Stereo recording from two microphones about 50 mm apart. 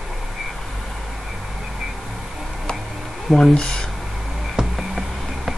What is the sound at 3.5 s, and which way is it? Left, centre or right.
Speech, centre.